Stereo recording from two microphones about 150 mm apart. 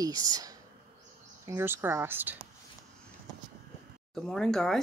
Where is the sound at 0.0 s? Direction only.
25° right (ahead or behind).